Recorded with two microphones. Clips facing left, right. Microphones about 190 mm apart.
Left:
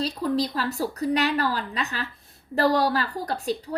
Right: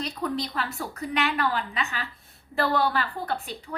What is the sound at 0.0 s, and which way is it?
Speech, 35° left (ahead or behind).